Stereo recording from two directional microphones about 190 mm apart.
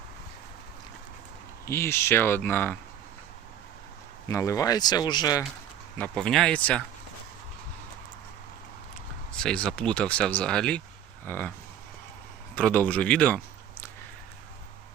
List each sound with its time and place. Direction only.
1.6 s speech: 15° left (ahead or behind)
4.3 s speech: 15° left (ahead or behind)
6.0 s speech: 5° left (ahead or behind)
9.4 s speech: 5° left (ahead or behind)
12.5 s speech: 10° left (ahead or behind)